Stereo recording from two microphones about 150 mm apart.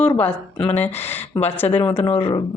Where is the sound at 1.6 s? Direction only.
15° left (ahead or behind).